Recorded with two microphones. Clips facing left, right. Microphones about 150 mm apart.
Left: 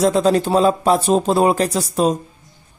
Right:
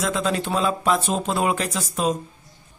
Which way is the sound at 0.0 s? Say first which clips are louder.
Left 9 dB; 35° left (ahead or behind).